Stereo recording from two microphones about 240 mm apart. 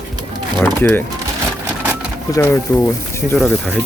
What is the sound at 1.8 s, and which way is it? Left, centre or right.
Sewing machine, centre.